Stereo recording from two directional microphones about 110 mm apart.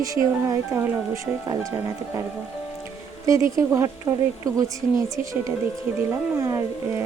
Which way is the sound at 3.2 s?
30° right (ahead or behind).